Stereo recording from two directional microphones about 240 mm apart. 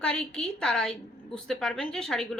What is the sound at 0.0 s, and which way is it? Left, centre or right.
A woman's voice, centre.